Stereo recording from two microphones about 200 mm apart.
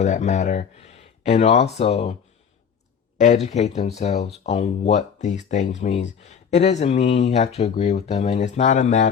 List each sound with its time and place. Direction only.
0.0 s speech: 35° left (ahead or behind)
3.2 s speech: 35° left (ahead or behind)